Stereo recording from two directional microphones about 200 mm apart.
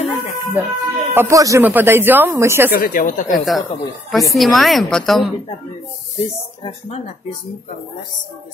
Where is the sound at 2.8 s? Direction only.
45° left (ahead or behind).